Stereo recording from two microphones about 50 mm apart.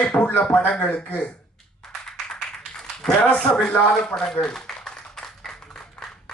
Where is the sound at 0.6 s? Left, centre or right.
Left.